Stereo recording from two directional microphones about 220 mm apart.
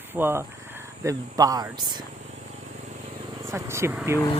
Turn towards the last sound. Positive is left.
turn(degrees=-10)  # may be behind; listen again after turning